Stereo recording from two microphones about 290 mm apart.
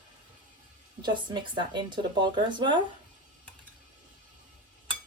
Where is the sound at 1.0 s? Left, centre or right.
Centre.